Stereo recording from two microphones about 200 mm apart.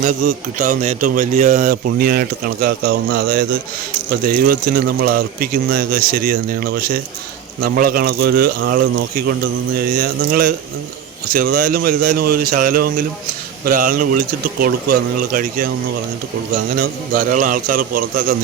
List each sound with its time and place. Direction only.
0.0 s a man's voice: 35° right (ahead or behind)
16.7 s speech: 45° right (ahead or behind)